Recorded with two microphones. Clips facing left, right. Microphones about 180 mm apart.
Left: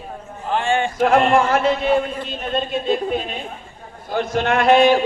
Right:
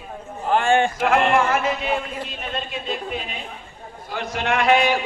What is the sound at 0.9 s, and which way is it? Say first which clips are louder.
Music: left 3 dB; 35° left (ahead or behind).